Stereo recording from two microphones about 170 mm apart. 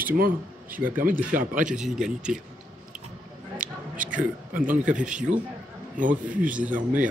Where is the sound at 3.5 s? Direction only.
55° right (ahead or behind).